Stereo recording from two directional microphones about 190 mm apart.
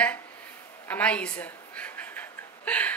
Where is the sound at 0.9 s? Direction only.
5° left (ahead or behind).